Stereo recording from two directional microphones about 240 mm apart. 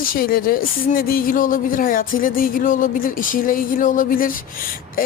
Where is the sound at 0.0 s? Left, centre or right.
Left.